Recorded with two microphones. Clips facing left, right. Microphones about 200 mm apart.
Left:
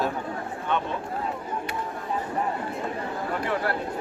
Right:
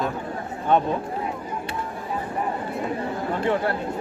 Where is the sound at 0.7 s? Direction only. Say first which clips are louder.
Right 8 dB; 35° right (ahead or behind).